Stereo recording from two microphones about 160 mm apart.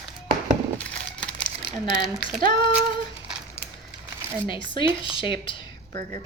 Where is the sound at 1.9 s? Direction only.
5° right (ahead or behind).